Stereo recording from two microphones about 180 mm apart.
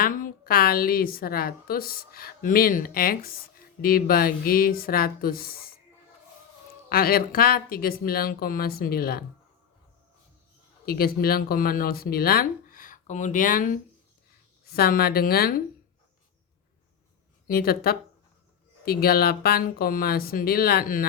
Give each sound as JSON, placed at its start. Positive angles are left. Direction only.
{"t": 0.0, "sound": "a woman's voice", "side_deg": 50}
{"t": 6.9, "sound": "a woman's voice", "side_deg": 55}
{"t": 10.8, "sound": "speech", "side_deg": 55}
{"t": 14.6, "sound": "a woman's voice", "side_deg": 60}
{"t": 17.4, "sound": "a woman's voice", "side_deg": 55}